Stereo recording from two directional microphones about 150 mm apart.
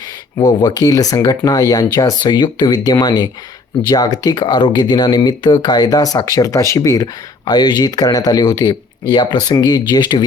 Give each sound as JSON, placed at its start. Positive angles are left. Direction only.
{"t": 0.3, "sound": "speech", "side_deg": 30}